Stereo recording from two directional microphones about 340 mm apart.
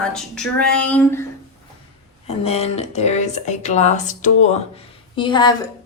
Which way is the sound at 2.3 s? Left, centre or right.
Centre.